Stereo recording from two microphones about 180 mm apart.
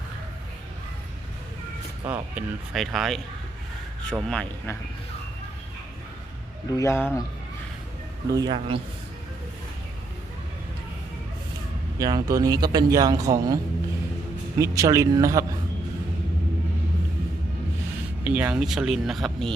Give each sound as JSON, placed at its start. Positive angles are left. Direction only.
{"t": 2.0, "sound": "speech", "side_deg": -10}
{"t": 6.7, "sound": "speech", "side_deg": 15}
{"t": 8.3, "sound": "speech", "side_deg": -25}
{"t": 11.9, "sound": "speech", "side_deg": -20}
{"t": 14.6, "sound": "a man's voice", "side_deg": -20}
{"t": 18.3, "sound": "speech", "side_deg": -10}